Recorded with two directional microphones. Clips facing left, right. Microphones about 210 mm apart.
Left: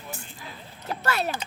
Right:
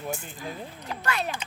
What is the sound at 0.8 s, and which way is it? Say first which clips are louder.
Speech: left 3 dB; 40° left (ahead or behind).